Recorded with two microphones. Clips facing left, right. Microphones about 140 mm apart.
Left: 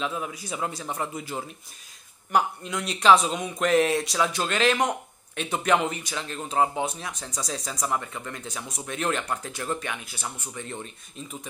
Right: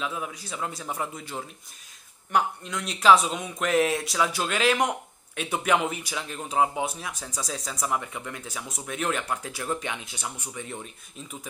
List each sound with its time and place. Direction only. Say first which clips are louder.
0.0 s speech: left 2 dB; centre (ahead or behind)
0.4 s speech: left 3 dB; 15° left (ahead or behind)
0.7 s speech: right 1 dB; centre (ahead or behind)
9.8 s speech: even; 20° right (ahead or behind)